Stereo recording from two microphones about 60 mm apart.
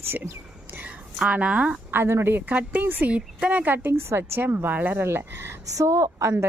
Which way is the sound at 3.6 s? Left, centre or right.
Right.